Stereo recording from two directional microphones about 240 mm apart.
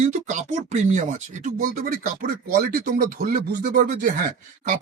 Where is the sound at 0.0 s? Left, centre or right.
Right.